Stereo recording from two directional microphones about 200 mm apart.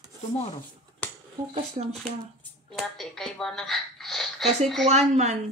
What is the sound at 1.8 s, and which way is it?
Speech, 35° right (ahead or behind).